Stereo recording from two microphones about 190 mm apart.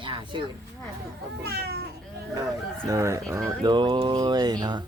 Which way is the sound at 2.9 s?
15° right (ahead or behind).